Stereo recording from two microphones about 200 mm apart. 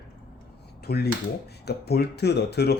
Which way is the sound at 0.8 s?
55° left (ahead or behind).